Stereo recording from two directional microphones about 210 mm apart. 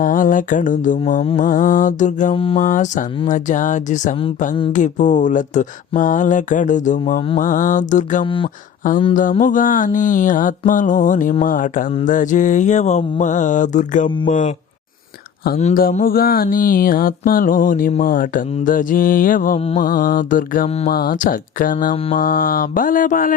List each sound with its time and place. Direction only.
0.0 s a sound: 40° left (ahead or behind)
1.4 s mantra: 40° left (ahead or behind)
2.3 s mantra: 25° left (ahead or behind)
2.6 s mantra: 35° left (ahead or behind)
7.0 s mantra: 25° left (ahead or behind)
7.3 s mantra: 40° left (ahead or behind)
8.2 s mantra: 25° left (ahead or behind)
9.4 s mantra: 40° left (ahead or behind)
15.5 s mantra: 35° left (ahead or behind)
19.5 s mantra: 30° left (ahead or behind)
19.8 s mantra: 40° left (ahead or behind)
20.9 s mantra: 45° left (ahead or behind)